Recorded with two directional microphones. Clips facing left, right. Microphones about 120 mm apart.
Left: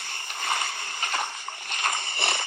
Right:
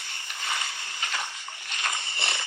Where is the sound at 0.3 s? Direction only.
50° left (ahead or behind).